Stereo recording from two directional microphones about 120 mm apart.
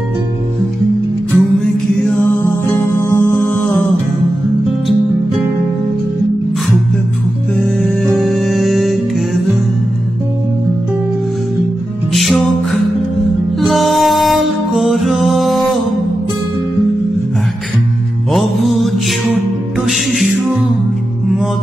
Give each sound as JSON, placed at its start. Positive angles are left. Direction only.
{"t": 1.3, "sound": "music", "side_deg": 0}
{"t": 2.2, "sound": "music", "side_deg": 20}
{"t": 7.5, "sound": "music", "side_deg": 5}
{"t": 12.1, "sound": "music", "side_deg": 0}
{"t": 13.6, "sound": "music", "side_deg": 0}
{"t": 18.3, "sound": "music", "side_deg": 0}